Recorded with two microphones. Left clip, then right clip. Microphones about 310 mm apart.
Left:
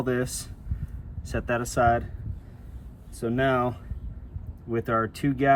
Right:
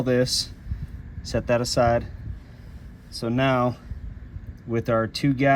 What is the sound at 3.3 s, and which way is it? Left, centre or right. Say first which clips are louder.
Speech: right 2 dB; centre.